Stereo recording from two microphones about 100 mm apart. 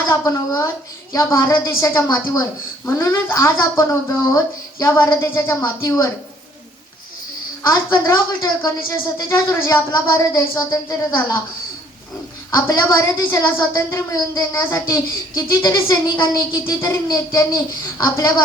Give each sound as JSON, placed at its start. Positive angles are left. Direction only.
{"t": 0.1, "sound": "speech", "side_deg": 30}
{"t": 7.7, "sound": "a woman's voice", "side_deg": 40}
{"t": 12.5, "sound": "a woman's voice", "side_deg": 30}